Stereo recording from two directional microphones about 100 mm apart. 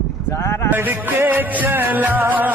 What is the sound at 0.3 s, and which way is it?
Speech, 25° left (ahead or behind).